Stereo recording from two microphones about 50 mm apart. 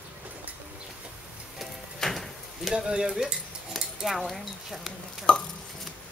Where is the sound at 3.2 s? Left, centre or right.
Centre.